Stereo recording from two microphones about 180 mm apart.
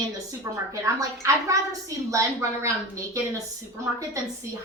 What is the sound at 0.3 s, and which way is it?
A woman's voice, 20° right (ahead or behind).